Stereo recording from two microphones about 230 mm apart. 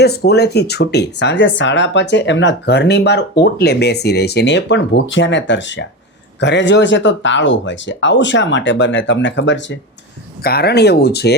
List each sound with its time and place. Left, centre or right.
0.0 s speech: left